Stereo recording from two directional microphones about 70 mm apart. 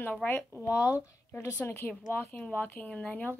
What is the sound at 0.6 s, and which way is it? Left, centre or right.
Speech, left.